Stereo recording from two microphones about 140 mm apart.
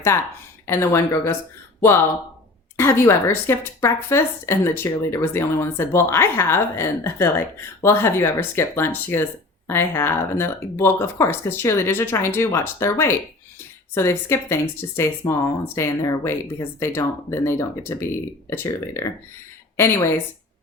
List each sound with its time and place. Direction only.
0.1 s speech: 20° left (ahead or behind)
2.7 s speech: 20° left (ahead or behind)